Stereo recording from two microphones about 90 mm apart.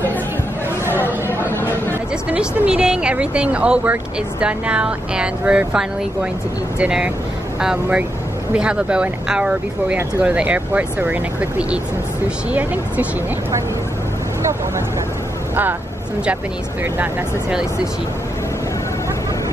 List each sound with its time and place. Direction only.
0.8 s chatter: 25° left (ahead or behind)
2.2 s speech: 15° right (ahead or behind)